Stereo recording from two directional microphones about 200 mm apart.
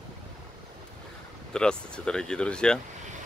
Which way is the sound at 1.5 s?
5° left (ahead or behind).